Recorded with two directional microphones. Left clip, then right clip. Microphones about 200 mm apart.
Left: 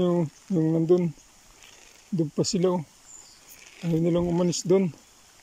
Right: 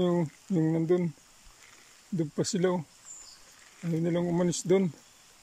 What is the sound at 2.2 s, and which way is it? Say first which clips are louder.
Speech: left 4 dB; 5° left (ahead or behind).